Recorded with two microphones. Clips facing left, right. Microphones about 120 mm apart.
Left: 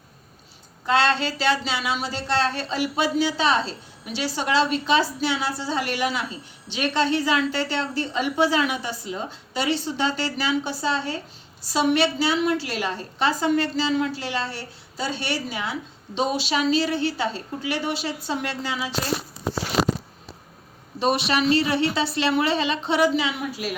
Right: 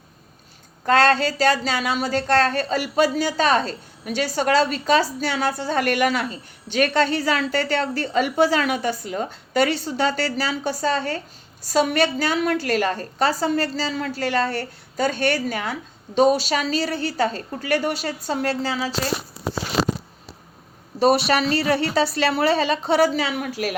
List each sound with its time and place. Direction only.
0.9 s a woman's voice: 45° right (ahead or behind)
21.0 s a woman's voice: 40° right (ahead or behind)